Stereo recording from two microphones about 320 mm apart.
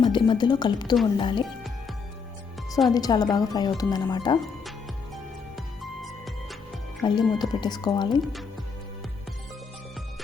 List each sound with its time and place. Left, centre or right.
0.0 s a woman's voice: centre
2.9 s a woman's voice: centre
5.1 s music: centre
7.0 s a woman's voice: centre